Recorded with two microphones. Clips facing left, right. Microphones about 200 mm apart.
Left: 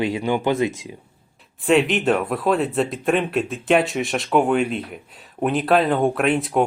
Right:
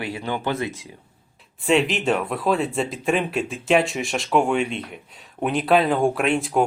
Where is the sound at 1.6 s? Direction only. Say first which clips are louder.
Left 2 dB; centre (ahead or behind).